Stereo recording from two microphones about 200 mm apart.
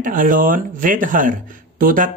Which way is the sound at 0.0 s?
45° right (ahead or behind).